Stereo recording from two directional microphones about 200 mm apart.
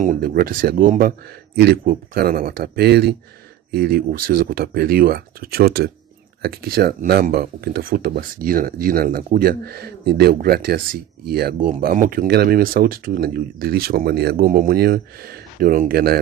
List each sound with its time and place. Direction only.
0.0 s speech: 40° right (ahead or behind)